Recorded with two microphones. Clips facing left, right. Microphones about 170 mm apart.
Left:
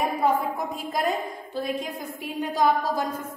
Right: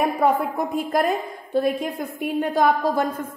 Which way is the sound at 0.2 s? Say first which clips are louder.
Right 3 dB; 55° right (ahead or behind).